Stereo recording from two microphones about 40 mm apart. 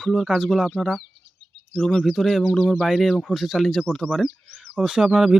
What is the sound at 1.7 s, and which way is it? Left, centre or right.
Speech, left.